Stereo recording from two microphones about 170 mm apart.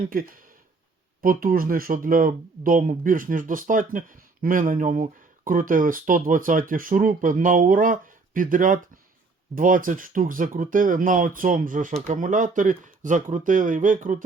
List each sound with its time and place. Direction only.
0.1 s speech: 55° right (ahead or behind)